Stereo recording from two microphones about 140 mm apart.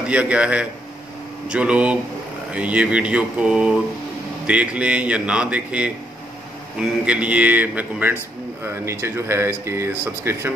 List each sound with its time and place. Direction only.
0.1 s speech: 10° right (ahead or behind)